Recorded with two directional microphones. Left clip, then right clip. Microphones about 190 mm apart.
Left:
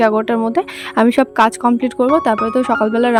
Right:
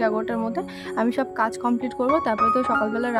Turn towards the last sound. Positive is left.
turn(degrees=35)  # may be behind; listen again after turning